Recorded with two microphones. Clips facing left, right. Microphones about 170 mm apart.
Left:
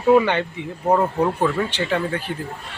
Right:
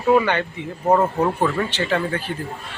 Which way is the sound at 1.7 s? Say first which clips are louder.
Even; 15° left (ahead or behind).